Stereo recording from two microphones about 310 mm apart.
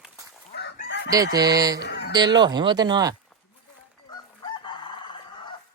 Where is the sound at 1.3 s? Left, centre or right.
Centre.